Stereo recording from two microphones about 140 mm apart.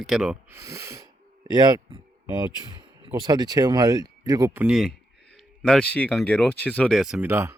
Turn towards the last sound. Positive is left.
turn(degrees=-20)  # may be behind; listen again after turning